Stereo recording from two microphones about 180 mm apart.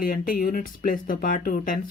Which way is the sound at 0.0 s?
50° left (ahead or behind).